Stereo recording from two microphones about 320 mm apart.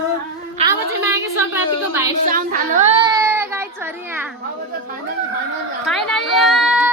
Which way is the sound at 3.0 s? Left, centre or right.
Centre.